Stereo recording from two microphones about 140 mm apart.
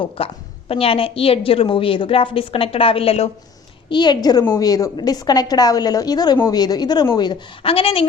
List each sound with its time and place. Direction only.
0.2 s a woman's voice: 40° left (ahead or behind)
3.8 s a woman's voice: 35° left (ahead or behind)